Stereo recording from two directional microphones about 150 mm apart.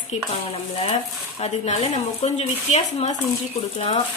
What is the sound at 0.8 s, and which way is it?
Speech, 45° left (ahead or behind).